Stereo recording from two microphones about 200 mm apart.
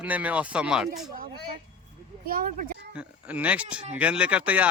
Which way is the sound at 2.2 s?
45° right (ahead or behind).